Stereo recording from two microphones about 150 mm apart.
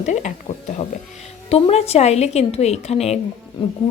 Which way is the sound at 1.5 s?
45° left (ahead or behind).